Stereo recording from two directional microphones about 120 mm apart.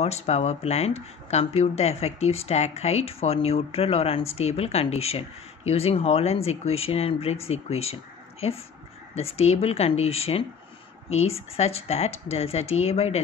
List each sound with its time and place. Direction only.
0.0 s speech: 65° left (ahead or behind)